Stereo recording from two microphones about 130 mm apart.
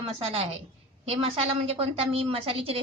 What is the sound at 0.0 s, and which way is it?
A woman's voice, 50° right (ahead or behind).